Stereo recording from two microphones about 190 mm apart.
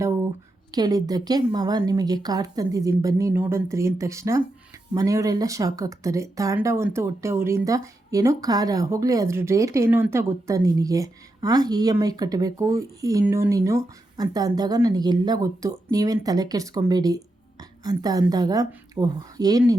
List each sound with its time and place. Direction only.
0.7 s a woman's voice: 20° right (ahead or behind)